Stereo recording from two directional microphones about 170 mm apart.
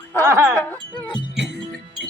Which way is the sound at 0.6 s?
10° left (ahead or behind).